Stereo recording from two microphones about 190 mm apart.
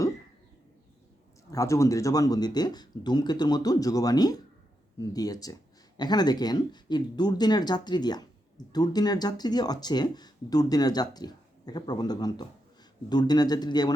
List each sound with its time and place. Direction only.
1.5 s speech: 15° left (ahead or behind)